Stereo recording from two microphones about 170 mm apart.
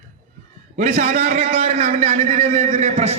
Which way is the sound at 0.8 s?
45° right (ahead or behind).